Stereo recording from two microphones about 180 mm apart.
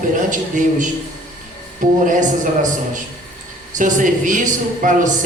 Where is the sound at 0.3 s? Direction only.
45° right (ahead or behind).